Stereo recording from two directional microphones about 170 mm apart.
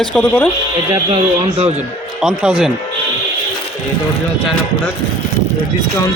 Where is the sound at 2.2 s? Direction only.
5° right (ahead or behind).